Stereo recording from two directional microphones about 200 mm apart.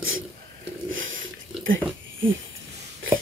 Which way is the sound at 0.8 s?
75° right (ahead or behind).